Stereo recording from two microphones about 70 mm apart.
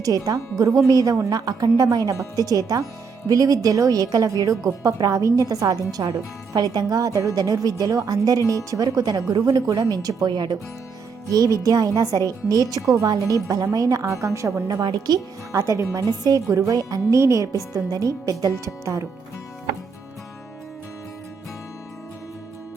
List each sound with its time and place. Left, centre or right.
0.0 s a woman's voice: right
10.2 s speech: right
11.3 s a woman's voice: right
14.7 s a woman's voice: right
15.5 s speech: right
16.2 s speech: right